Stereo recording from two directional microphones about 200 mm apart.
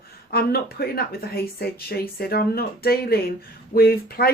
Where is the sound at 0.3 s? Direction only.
50° left (ahead or behind).